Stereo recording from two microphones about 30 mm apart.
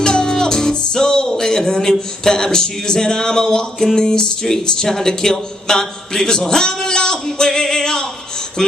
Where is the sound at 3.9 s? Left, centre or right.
Left.